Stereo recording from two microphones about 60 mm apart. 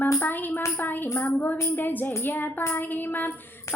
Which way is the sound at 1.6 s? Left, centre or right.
Left.